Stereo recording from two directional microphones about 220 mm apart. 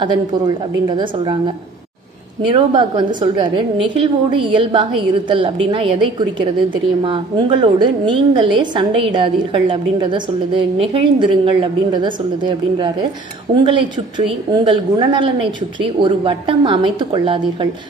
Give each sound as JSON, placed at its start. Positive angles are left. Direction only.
{"t": 0.0, "sound": "a woman's voice", "side_deg": -20}
{"t": 2.5, "sound": "a woman's voice", "side_deg": -20}
{"t": 7.1, "sound": "a woman's voice", "side_deg": -25}